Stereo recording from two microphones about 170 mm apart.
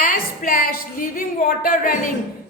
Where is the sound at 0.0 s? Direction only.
55° left (ahead or behind).